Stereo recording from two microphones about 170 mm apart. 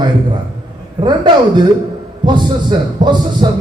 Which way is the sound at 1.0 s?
25° right (ahead or behind).